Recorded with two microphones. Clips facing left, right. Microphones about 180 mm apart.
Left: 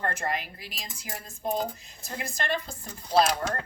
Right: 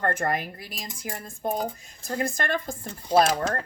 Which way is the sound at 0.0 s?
50° right (ahead or behind).